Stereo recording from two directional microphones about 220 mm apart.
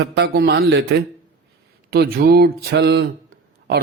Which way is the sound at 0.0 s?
50° right (ahead or behind).